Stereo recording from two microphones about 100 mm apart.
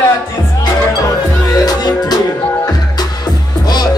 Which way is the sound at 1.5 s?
40° left (ahead or behind).